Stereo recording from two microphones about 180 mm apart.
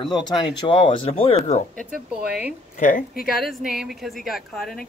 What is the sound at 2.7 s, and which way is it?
Speech, 45° left (ahead or behind).